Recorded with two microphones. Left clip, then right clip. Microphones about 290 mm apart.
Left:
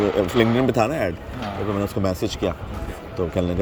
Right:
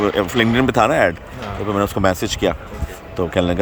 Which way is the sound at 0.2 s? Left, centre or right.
Centre.